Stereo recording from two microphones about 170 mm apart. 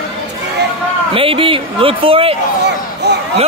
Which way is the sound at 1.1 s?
35° right (ahead or behind).